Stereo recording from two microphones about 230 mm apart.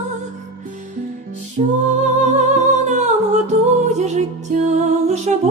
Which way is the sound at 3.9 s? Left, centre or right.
Right.